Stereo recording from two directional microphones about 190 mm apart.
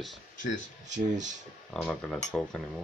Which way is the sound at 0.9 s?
40° right (ahead or behind).